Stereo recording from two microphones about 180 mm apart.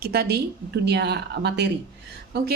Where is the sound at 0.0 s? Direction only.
60° right (ahead or behind).